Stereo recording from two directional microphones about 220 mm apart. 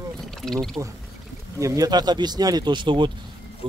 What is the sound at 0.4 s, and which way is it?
Speech, centre (ahead or behind).